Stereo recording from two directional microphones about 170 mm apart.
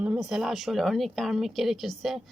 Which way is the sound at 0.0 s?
5° right (ahead or behind).